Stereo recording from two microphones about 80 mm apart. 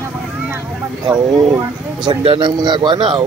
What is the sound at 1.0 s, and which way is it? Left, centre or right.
Speech, right.